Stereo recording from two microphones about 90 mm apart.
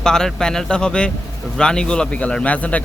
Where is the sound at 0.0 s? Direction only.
5° left (ahead or behind).